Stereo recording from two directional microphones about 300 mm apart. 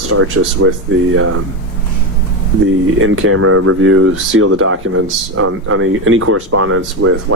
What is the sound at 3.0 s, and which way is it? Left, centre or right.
Speech, right.